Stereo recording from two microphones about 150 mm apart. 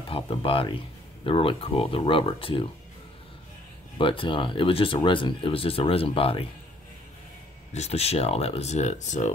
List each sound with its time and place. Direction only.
0.1 s speech: 35° left (ahead or behind)
4.0 s speech: 35° left (ahead or behind)
7.7 s speech: 45° left (ahead or behind)